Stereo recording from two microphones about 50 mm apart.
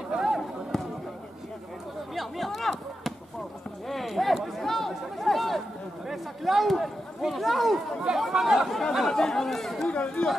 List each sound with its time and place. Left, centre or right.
0.1 s basketball bounce: centre
0.4 s basketball bounce: centre
2.1 s chop: centre
3.9 s a sound: centre
6.0 s speech: centre
9.1 s speech: centre
9.8 s speech: left